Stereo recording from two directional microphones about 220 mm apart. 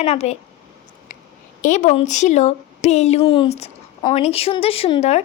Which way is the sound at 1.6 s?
35° left (ahead or behind).